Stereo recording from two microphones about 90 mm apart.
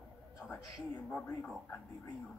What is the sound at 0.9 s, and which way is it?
Speech, 20° left (ahead or behind).